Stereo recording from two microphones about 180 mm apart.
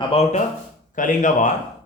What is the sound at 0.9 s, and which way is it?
Speech, 45° left (ahead or behind).